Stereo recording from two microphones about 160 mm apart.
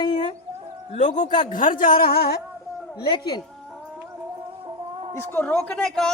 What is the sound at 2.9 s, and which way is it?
Speech, 25° left (ahead or behind).